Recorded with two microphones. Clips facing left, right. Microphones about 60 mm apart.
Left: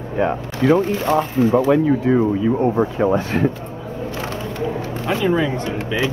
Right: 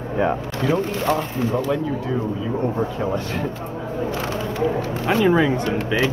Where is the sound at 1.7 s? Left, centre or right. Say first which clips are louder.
Left 8 dB; left.